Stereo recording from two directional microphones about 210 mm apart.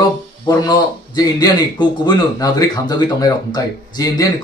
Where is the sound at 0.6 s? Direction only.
20° left (ahead or behind).